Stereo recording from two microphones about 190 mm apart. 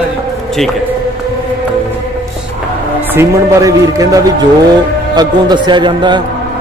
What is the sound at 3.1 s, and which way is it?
A man's voice, 15° right (ahead or behind).